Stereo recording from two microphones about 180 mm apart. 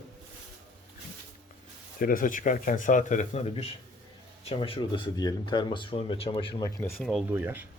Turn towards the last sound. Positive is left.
turn(degrees=-10)  # may be behind; listen again after turning